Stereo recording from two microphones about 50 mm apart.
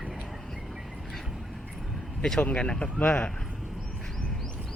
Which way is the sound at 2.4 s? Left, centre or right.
Left.